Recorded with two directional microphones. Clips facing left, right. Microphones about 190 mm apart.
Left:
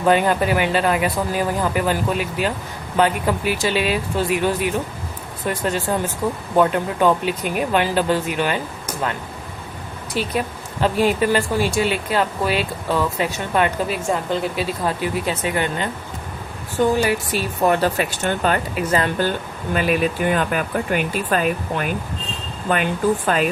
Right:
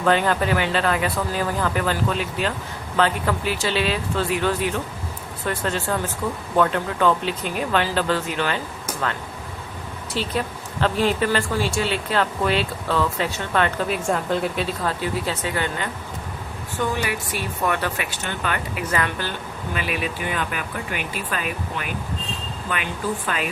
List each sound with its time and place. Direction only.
0.0 s speech: 10° left (ahead or behind)
10.2 s speech: 10° left (ahead or behind)
13.8 s speech: centre (ahead or behind); by 15.9 s 20° left (ahead or behind)
16.8 s speech: 35° left (ahead or behind)
18.8 s a woman's voice: 25° left (ahead or behind)
19.7 s speech: 45° left (ahead or behind)